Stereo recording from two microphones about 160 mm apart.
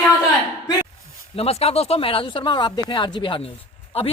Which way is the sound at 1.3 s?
40° left (ahead or behind).